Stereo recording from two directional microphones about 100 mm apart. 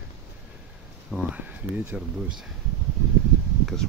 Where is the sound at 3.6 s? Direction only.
5° left (ahead or behind).